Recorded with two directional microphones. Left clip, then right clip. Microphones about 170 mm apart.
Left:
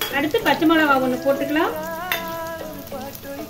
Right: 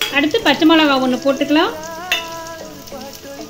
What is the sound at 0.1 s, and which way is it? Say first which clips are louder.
Speech: right 3 dB; 50° right (ahead or behind).